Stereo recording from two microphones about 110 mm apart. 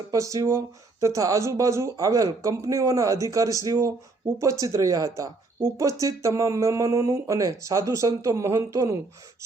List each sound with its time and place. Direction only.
0.1 s speech: 30° right (ahead or behind)